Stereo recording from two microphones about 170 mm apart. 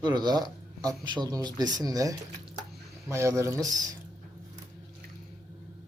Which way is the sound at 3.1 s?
15° right (ahead or behind).